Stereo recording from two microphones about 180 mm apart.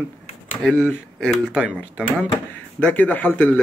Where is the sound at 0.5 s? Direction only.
Centre (ahead or behind).